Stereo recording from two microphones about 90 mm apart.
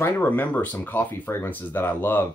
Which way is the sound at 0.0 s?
20° left (ahead or behind).